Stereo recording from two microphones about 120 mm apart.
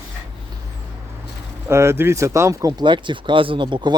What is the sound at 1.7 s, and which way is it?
Speech, 20° right (ahead or behind).